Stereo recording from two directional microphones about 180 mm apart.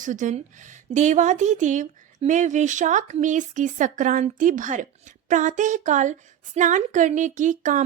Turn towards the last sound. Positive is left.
turn(degrees=-45)  # may be behind; listen again after turning